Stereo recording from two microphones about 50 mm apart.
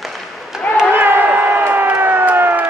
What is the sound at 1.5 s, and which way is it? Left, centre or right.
Crowd, right.